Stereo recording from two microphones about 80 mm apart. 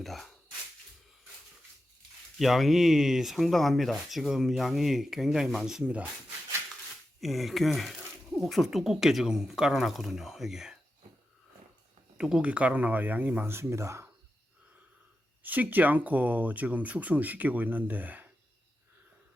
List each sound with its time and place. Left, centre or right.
0.0 s speech: centre
2.4 s speech: centre
7.2 s speech: centre
12.1 s speech: centre; by 14.1 s right
15.4 s speech: right